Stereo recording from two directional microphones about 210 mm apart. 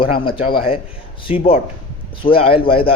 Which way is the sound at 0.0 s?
25° left (ahead or behind).